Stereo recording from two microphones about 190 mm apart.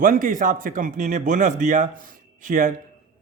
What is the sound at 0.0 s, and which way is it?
Speech, 45° right (ahead or behind).